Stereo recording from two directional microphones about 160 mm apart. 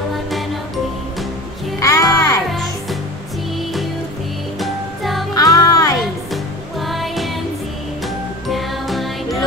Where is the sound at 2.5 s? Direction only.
Centre (ahead or behind).